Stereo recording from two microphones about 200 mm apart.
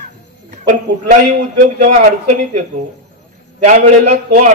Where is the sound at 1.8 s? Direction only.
40° right (ahead or behind).